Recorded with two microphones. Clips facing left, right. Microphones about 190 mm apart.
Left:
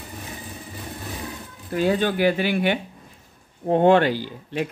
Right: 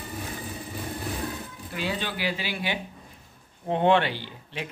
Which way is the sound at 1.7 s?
45° left (ahead or behind).